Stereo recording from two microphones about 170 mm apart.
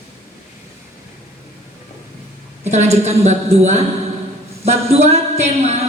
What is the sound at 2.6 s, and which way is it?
A woman's voice, 40° right (ahead or behind).